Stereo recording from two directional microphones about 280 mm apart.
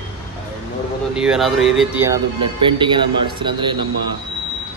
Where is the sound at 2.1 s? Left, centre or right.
Centre.